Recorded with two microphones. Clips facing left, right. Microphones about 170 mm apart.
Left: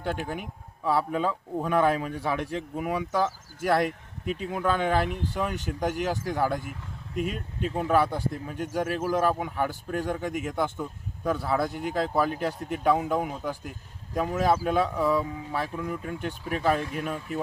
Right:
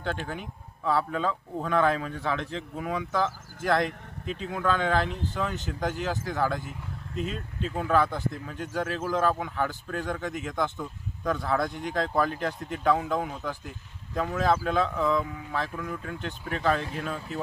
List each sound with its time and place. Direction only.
0.0 s speech: 10° left (ahead or behind)